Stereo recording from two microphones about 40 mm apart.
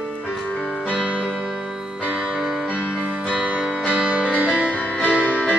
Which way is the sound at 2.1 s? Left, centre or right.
Centre.